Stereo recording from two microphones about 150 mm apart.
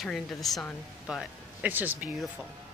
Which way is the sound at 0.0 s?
Centre (ahead or behind).